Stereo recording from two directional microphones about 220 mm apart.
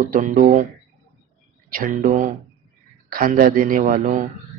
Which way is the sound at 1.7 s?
40° right (ahead or behind).